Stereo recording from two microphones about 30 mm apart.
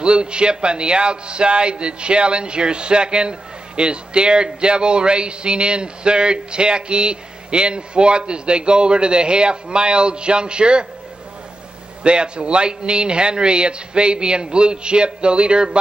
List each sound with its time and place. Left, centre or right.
0.0 s a man's voice: right
12.0 s a man's voice: right